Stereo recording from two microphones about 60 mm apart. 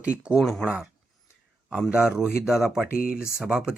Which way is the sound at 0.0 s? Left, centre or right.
Right.